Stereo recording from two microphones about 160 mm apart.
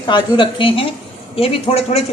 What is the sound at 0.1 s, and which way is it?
A woman's voice, 30° left (ahead or behind).